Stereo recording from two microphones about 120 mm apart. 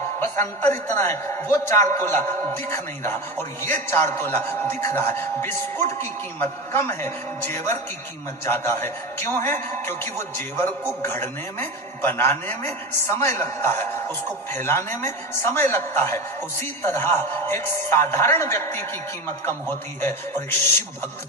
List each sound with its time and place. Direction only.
0.3 s a man's voice: 20° left (ahead or behind)
8.4 s a man's voice: 15° left (ahead or behind)